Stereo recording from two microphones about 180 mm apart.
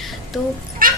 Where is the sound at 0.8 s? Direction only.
50° right (ahead or behind).